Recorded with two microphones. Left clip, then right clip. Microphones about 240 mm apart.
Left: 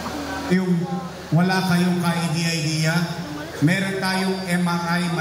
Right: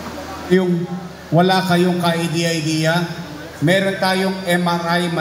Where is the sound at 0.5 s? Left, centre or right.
Right.